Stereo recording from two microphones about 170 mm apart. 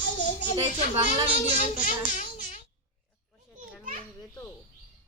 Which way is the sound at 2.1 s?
50° left (ahead or behind).